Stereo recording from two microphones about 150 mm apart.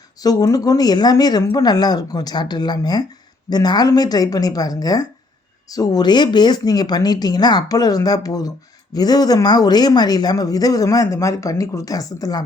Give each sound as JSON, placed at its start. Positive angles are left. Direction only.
{"t": 0.2, "sound": "speech", "side_deg": 25}